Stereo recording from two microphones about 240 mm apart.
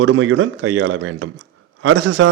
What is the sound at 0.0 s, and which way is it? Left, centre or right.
A man's voice, right.